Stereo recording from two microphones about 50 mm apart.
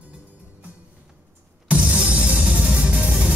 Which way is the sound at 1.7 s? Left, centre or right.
Right.